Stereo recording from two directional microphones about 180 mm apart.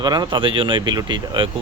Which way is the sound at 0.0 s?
25° right (ahead or behind).